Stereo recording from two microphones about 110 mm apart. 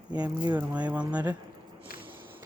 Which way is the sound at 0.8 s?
10° right (ahead or behind).